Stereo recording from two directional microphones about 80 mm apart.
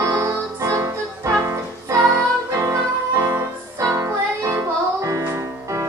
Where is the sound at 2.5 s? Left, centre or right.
Right.